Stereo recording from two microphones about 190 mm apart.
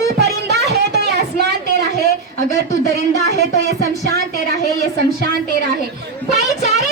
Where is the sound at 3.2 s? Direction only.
60° right (ahead or behind).